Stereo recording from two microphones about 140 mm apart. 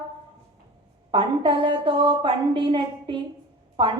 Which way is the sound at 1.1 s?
35° right (ahead or behind).